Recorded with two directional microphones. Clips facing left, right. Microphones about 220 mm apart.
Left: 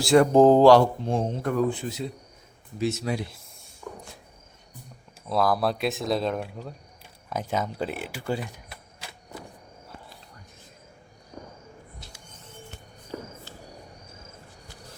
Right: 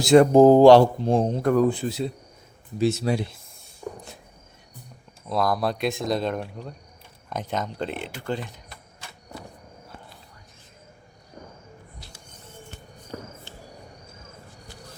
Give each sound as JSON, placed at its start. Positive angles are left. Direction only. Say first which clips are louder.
{"t": 0.0, "sound": "a man's voice", "louder": "right 4 dB", "side_deg": -20}
{"t": 0.3, "sound": "a man's voice", "louder": "right 2 dB", "side_deg": -10}
{"t": 0.7, "sound": "a man's voice", "louder": "right 3 dB", "side_deg": -35}
{"t": 3.8, "sound": "a sound", "louder": "right 4 dB", "side_deg": -35}
{"t": 5.3, "sound": "speech", "louder": "even", "side_deg": 5}